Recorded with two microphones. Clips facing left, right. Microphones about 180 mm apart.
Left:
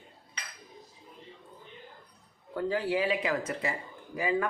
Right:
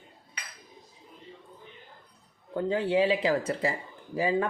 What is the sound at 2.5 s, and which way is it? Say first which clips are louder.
Speech: right 3 dB; 20° right (ahead or behind).